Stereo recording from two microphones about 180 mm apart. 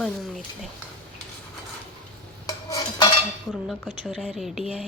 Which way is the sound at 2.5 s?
20° left (ahead or behind).